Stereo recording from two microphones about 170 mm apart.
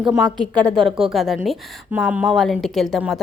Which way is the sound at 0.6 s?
30° right (ahead or behind).